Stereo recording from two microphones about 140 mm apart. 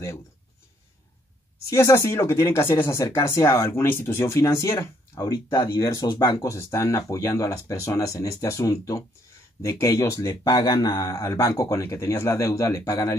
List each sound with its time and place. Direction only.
1.7 s speech: 20° left (ahead or behind)